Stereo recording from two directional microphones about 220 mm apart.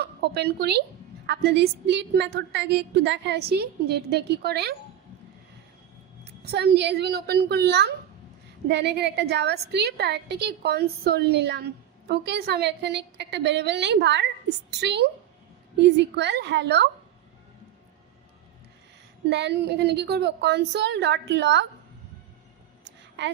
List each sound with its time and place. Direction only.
0.0 s a woman's voice: 45° right (ahead or behind)
6.4 s a woman's voice: 45° right (ahead or behind)
19.3 s a woman's voice: 50° right (ahead or behind)
23.2 s a woman's voice: 50° right (ahead or behind)